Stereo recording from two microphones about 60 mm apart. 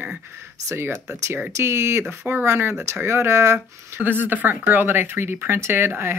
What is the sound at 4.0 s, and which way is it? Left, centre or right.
Speech, right.